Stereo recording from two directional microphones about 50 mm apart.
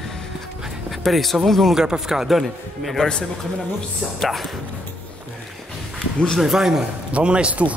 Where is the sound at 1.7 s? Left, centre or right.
Centre.